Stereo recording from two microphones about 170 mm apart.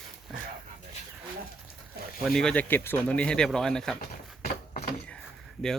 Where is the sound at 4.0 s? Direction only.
60° left (ahead or behind).